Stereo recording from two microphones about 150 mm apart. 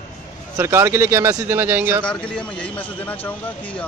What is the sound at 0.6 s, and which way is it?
A man's voice, 20° right (ahead or behind).